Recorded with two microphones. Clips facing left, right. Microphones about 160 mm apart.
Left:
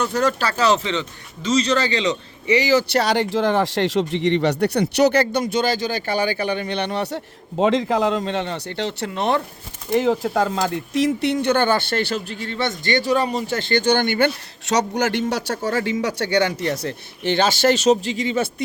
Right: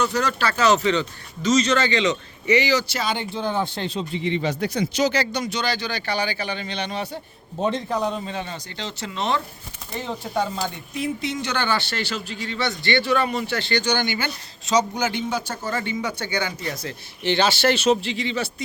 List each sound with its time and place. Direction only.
0.0 s a man's voice: 50° left (ahead or behind)
2.7 s speech: 60° left (ahead or behind)
7.6 s speech: 90° left; by 9.4 s 55° left (ahead or behind)
9.9 s speech: 90° left; by 14.3 s 55° left (ahead or behind)
14.7 s speech: 75° left (ahead or behind)
17.2 s speech: 45° left (ahead or behind)